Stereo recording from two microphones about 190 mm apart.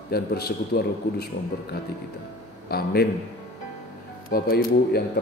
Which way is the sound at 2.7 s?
55° left (ahead or behind).